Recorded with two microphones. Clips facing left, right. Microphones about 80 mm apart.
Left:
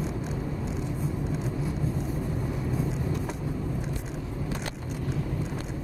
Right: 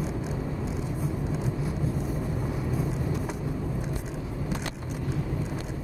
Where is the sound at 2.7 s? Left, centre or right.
Centre.